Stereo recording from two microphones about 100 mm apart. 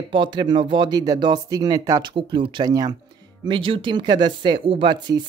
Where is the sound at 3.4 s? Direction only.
60° right (ahead or behind).